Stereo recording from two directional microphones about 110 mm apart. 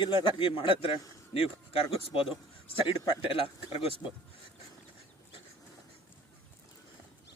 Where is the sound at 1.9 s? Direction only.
55° left (ahead or behind).